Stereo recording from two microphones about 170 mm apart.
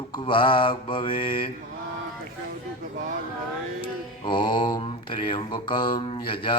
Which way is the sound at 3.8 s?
30° left (ahead or behind).